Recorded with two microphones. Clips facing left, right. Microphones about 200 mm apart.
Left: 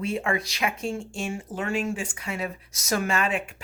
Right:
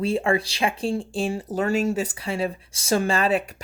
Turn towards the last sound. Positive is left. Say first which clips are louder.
# right 5 dB
turn(degrees=-35)  # may be behind; listen again after turning